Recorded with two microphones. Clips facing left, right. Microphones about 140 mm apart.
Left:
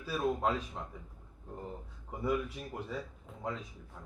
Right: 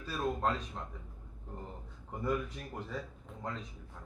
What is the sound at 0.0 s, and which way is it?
Speech, 10° left (ahead or behind).